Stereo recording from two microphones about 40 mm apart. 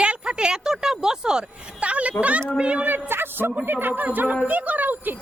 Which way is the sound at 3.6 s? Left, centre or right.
Right.